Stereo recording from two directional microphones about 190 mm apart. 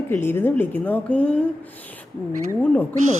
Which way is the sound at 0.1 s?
10° left (ahead or behind).